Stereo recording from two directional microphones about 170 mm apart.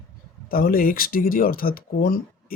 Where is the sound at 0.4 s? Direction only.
60° left (ahead or behind).